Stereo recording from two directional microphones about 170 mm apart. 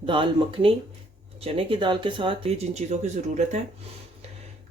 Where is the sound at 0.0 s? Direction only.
30° right (ahead or behind).